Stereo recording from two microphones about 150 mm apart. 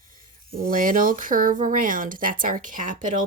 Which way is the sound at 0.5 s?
70° right (ahead or behind).